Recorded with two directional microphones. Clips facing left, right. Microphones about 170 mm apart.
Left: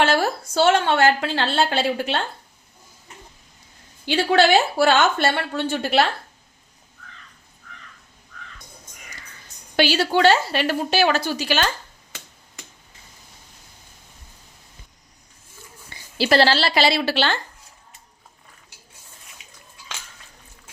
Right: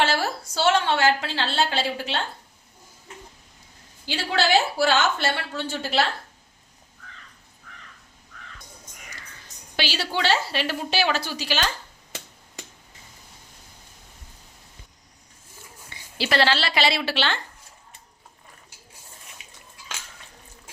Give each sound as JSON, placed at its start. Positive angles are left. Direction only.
{"t": 0.0, "sound": "a woman's voice", "side_deg": 50}
{"t": 4.0, "sound": "a woman's voice", "side_deg": 60}
{"t": 9.7, "sound": "a woman's voice", "side_deg": 50}
{"t": 15.9, "sound": "speech", "side_deg": 40}